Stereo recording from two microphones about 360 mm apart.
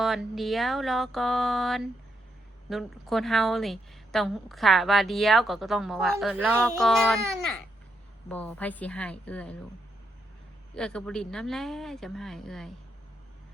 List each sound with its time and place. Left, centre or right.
0.0 s a woman's voice: centre
8.3 s a woman's voice: centre
10.8 s a woman's voice: centre